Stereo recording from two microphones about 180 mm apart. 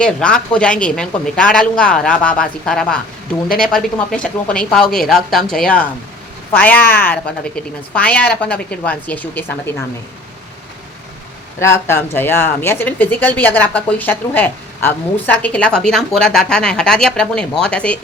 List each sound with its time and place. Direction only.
0.0 s speech: 5° left (ahead or behind)
11.6 s speech: 10° left (ahead or behind)